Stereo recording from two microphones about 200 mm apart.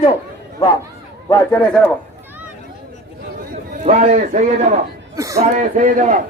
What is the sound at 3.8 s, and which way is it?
Speech, 35° right (ahead or behind).